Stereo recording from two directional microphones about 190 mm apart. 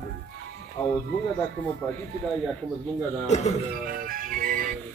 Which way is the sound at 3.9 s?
50° right (ahead or behind).